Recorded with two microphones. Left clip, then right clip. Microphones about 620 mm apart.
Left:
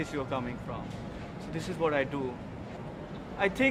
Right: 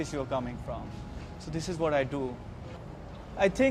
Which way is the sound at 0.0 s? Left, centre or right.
Right.